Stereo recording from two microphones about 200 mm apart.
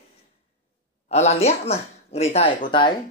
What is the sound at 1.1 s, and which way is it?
Speech, 30° left (ahead or behind).